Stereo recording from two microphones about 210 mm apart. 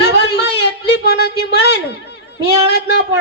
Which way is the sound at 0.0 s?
55° left (ahead or behind).